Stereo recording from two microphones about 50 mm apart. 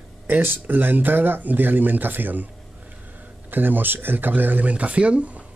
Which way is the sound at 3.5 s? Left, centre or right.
Right.